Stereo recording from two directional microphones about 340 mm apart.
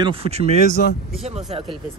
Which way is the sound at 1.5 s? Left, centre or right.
Centre.